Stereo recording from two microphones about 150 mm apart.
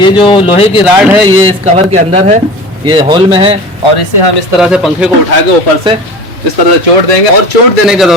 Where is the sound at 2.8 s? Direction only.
35° right (ahead or behind).